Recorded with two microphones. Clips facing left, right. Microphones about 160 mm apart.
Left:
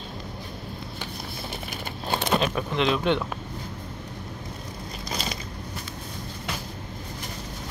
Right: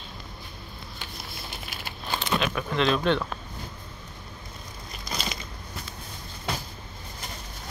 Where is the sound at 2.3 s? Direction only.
30° left (ahead or behind).